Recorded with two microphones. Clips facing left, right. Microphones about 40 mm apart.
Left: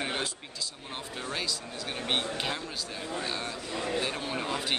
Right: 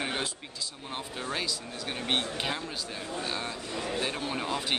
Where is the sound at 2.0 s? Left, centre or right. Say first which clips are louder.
Even; centre.